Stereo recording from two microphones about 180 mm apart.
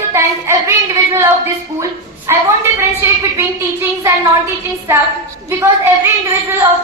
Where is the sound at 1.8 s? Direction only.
15° right (ahead or behind).